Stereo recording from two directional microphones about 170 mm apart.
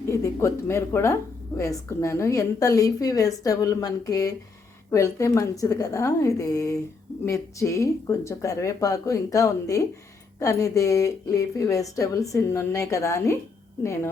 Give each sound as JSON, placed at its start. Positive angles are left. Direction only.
{"t": 0.1, "sound": "a woman's voice", "side_deg": 15}